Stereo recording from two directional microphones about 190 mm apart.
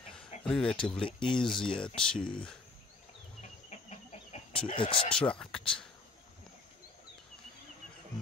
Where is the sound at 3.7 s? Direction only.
35° left (ahead or behind).